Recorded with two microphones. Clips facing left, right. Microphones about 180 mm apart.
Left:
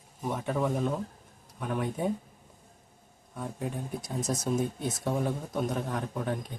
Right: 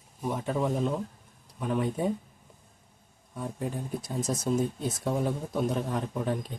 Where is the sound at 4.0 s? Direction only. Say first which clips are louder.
Even; 30° right (ahead or behind).